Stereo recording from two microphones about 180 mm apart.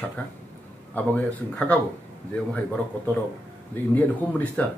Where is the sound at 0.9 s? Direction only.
10° left (ahead or behind).